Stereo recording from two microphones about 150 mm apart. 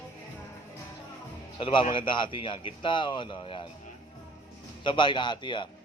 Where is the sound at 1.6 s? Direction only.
35° left (ahead or behind).